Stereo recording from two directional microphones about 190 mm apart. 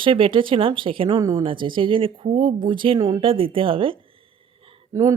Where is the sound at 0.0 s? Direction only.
25° right (ahead or behind).